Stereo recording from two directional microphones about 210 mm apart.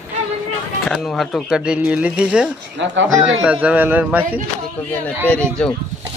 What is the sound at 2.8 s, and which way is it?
Speech, 65° right (ahead or behind).